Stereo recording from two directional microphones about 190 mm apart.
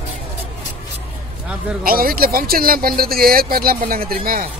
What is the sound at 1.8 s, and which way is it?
Speech, 50° right (ahead or behind).